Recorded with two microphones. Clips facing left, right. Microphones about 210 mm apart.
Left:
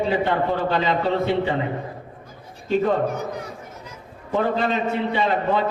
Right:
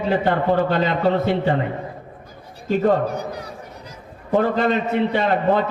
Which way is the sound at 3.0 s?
35° right (ahead or behind).